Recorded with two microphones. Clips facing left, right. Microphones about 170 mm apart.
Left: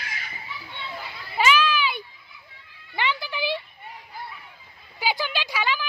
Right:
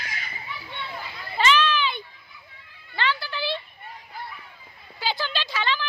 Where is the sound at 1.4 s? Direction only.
10° left (ahead or behind).